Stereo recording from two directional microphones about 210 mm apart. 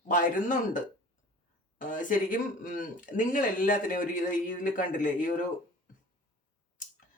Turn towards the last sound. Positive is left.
turn(degrees=40)  # may be behind; listen again after turning